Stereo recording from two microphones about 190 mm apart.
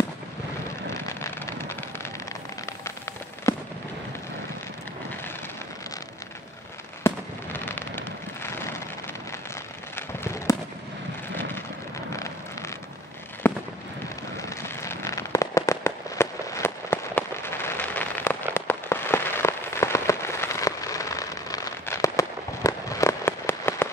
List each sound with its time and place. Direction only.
0.9 s vehicle: 15° left (ahead or behind)
3.5 s fireworks: 15° left (ahead or behind)
7.0 s fireworks: 10° left (ahead or behind)
9.9 s a sound: 15° left (ahead or behind)
12.1 s vehicle: 15° left (ahead or behind)
13.4 s fireworks: 10° left (ahead or behind)